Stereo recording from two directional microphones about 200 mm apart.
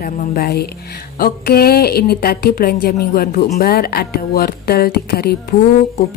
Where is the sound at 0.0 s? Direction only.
45° left (ahead or behind).